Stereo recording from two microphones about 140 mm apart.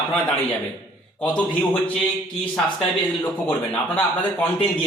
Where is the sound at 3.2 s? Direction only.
15° left (ahead or behind).